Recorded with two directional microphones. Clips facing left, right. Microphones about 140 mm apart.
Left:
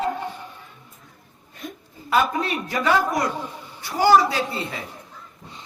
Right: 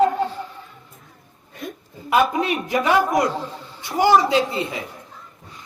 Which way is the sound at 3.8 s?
20° right (ahead or behind).